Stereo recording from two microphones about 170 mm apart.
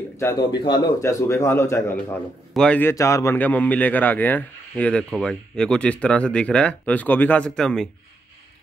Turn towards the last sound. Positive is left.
turn(degrees=5)  # may be behind; listen again after turning